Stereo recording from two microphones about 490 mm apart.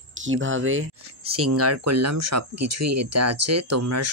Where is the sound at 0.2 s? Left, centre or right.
Right.